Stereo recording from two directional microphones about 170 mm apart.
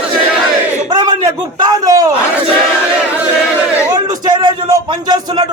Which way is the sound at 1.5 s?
20° right (ahead or behind).